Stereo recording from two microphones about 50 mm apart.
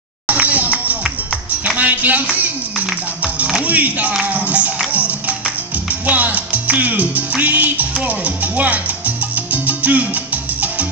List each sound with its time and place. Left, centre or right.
0.3 s a sound: right
1.8 s music: right
3.3 s speech: right
4.1 s music: right
6.0 s music: right
8.5 s salsa music: right